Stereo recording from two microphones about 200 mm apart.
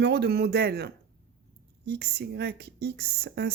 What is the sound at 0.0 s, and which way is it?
Speech, 55° right (ahead or behind).